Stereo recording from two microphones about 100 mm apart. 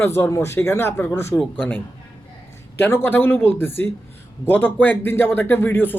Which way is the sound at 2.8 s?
20° left (ahead or behind).